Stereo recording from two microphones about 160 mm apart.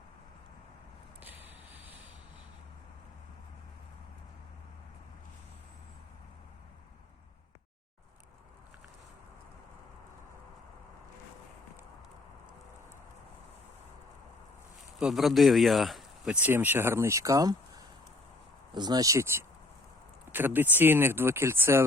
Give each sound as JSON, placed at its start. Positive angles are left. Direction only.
{"t": 1.2, "sound": "vehicle", "side_deg": -10}
{"t": 14.9, "sound": "speech", "side_deg": 0}